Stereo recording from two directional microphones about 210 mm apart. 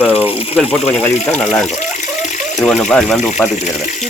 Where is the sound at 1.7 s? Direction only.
35° left (ahead or behind).